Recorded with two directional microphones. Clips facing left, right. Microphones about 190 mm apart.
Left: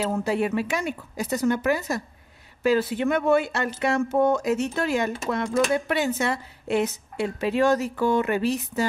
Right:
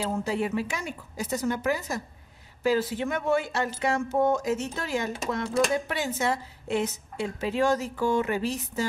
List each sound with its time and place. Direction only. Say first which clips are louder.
0.0 s speech: left 4 dB; 65° left (ahead or behind)